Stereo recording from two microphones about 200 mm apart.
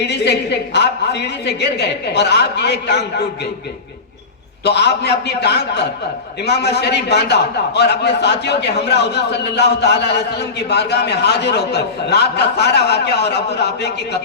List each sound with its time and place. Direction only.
0.0 s a man's voice: 60° left (ahead or behind)
4.6 s a man's voice: 55° left (ahead or behind)